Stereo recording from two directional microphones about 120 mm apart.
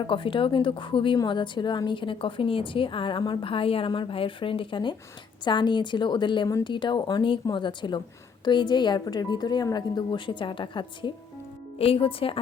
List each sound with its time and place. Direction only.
0.0 s a woman's voice: 45° left (ahead or behind)